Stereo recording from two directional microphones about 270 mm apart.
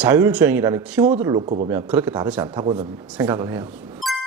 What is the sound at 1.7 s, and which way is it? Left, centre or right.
Speech, centre.